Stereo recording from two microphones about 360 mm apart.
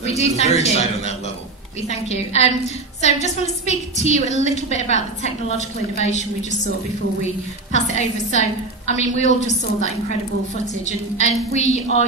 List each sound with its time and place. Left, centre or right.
0.0 s a woman's voice: centre
7.9 s a woman's voice: centre
10.9 s a woman's voice: centre